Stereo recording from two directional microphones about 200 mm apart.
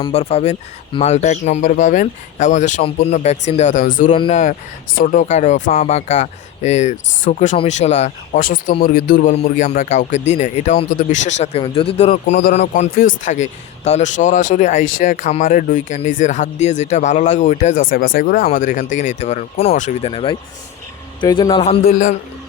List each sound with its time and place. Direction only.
0.0 s speech: 30° left (ahead or behind)
4.1 s a man's voice: 30° left (ahead or behind)
21.8 s speech: 40° left (ahead or behind)